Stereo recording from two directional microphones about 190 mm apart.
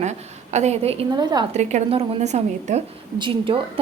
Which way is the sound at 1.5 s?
35° right (ahead or behind).